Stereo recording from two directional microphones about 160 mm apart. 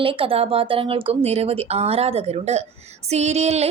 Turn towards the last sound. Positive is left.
turn(degrees=-45)  # may be behind; listen again after turning